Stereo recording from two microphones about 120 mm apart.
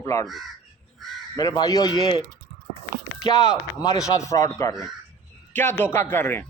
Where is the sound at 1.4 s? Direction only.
30° left (ahead or behind).